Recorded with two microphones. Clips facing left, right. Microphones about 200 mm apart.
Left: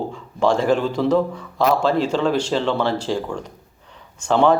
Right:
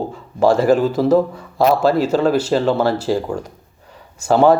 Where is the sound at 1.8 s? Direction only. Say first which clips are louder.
Right 4 dB; 5° right (ahead or behind).